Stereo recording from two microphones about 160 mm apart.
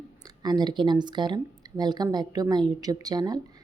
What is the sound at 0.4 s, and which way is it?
Speech, 25° right (ahead or behind).